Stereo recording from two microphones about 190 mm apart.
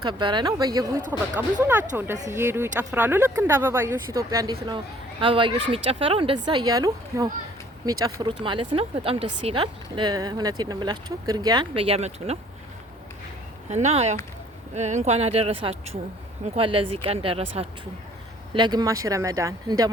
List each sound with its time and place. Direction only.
0.0 s speech: 25° right (ahead or behind)
1.4 s speech: 10° right (ahead or behind)
8.4 s speech: 30° right (ahead or behind)
13.7 s speech: 35° right (ahead or behind); by 19.9 s 20° right (ahead or behind)